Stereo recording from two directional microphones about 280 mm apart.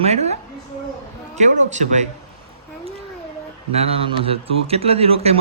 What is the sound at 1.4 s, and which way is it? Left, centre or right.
Speech, right.